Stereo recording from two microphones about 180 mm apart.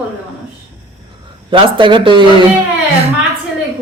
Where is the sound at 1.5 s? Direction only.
30° right (ahead or behind).